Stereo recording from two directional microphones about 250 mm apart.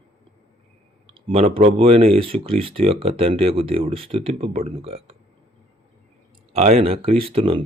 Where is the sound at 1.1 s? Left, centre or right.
Right.